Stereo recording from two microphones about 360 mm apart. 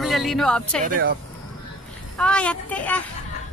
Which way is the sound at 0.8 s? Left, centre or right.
Right.